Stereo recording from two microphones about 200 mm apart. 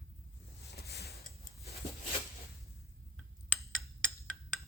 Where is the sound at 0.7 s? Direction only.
55° left (ahead or behind).